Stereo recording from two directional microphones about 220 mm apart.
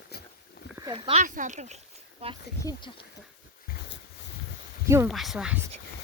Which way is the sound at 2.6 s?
15° left (ahead or behind).